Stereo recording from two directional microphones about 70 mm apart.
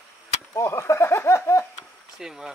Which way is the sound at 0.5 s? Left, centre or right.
Left.